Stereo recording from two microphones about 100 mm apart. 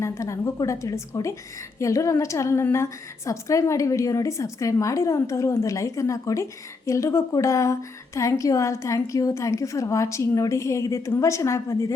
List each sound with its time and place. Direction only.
0.0 s a woman's voice: 30° left (ahead or behind)